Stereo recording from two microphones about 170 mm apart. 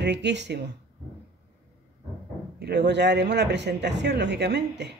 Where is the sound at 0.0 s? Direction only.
90° right.